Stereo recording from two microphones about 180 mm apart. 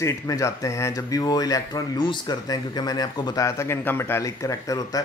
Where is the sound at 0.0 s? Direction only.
15° left (ahead or behind).